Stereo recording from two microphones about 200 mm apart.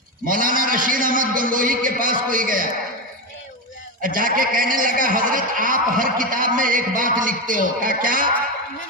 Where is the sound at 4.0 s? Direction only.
45° right (ahead or behind).